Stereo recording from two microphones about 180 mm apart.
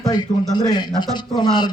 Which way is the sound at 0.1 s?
25° left (ahead or behind).